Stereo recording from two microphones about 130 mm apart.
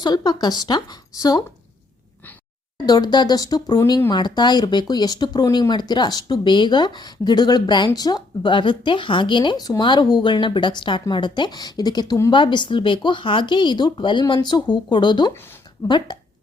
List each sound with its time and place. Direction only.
0.0 s speech: 30° left (ahead or behind)
2.8 s speech: 30° left (ahead or behind)